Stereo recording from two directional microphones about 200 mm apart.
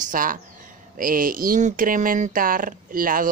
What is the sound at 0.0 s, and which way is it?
Speech, 40° right (ahead or behind).